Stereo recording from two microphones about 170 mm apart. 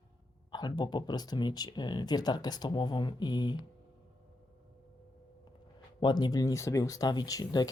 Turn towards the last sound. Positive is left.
turn(degrees=20)  # may be behind; listen again after turning